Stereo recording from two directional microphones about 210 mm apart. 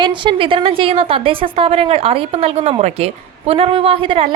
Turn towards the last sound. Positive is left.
turn(degrees=-25)  # may be behind; listen again after turning